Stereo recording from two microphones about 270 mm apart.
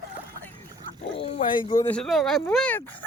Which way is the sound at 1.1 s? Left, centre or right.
Centre.